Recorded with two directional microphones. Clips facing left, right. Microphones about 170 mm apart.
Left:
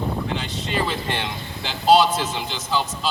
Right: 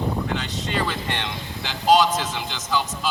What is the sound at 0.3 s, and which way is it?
Speech, 15° left (ahead or behind).